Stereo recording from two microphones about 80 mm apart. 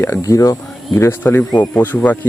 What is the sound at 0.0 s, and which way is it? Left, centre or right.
Speech, left.